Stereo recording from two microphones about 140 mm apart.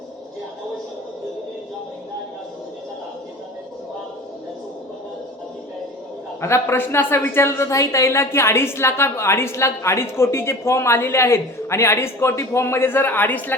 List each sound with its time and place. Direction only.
6.4 s a woman's voice: 20° left (ahead or behind)